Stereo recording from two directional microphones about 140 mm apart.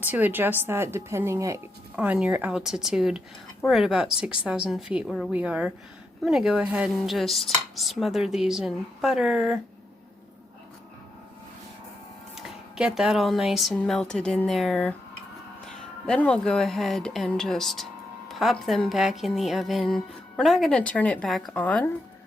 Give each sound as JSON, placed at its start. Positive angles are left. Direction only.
{"t": 0.0, "sound": "a woman's voice", "side_deg": -10}
{"t": 2.0, "sound": "speech", "side_deg": -10}
{"t": 5.3, "sound": "a woman's voice", "side_deg": -10}
{"t": 12.7, "sound": "speech", "side_deg": -5}
{"t": 16.0, "sound": "speech", "side_deg": 5}